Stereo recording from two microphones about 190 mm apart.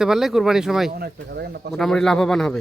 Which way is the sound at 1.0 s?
55° right (ahead or behind).